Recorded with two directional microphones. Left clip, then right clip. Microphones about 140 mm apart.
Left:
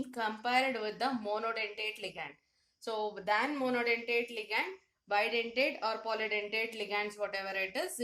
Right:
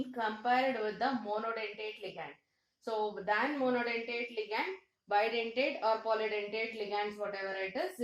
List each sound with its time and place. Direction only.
0.2 s speech: 35° left (ahead or behind)
2.8 s speech: 35° left (ahead or behind)